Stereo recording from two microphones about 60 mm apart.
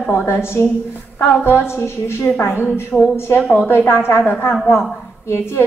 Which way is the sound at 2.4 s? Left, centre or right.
Left.